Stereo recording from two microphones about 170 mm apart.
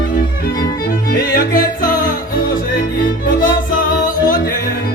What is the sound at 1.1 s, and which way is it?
Music, 55° left (ahead or behind).